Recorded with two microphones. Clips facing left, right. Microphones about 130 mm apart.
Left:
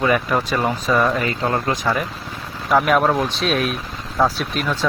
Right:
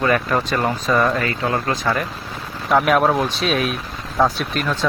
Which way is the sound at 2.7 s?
Centre (ahead or behind).